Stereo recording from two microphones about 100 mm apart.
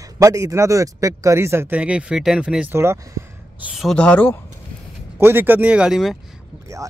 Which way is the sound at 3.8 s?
5° left (ahead or behind).